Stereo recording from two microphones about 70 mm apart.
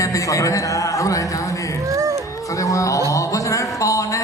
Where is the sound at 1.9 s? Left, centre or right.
Right.